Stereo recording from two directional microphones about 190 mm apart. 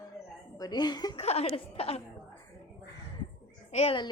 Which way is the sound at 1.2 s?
35° left (ahead or behind).